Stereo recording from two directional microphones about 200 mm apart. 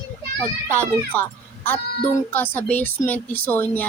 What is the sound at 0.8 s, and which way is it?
A child's voice, 10° left (ahead or behind).